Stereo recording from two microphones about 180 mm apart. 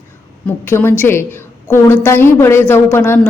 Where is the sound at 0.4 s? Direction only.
10° left (ahead or behind).